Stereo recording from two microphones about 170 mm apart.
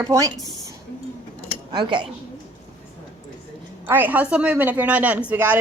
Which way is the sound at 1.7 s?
25° right (ahead or behind).